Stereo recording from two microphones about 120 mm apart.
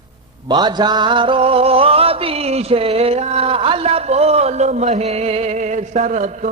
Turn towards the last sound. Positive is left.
turn(degrees=-85)